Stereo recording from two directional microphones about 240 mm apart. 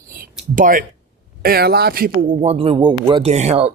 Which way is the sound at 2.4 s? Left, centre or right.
Right.